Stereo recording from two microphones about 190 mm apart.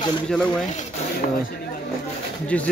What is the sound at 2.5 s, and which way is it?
Speech, 5° left (ahead or behind).